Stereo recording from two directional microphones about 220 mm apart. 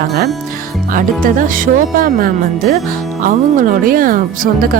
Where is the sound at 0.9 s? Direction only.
40° right (ahead or behind).